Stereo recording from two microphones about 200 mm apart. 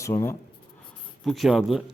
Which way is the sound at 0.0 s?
15° left (ahead or behind).